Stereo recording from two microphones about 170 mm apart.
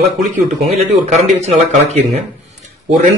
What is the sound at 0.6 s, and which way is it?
Speech, centre (ahead or behind).